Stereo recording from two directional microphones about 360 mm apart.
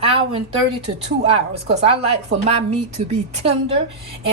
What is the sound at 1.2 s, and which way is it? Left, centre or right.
A woman's voice, centre.